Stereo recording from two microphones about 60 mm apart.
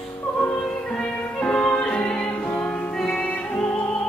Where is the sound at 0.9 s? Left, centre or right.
Centre.